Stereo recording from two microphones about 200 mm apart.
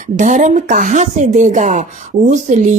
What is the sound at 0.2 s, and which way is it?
Speech, 40° right (ahead or behind).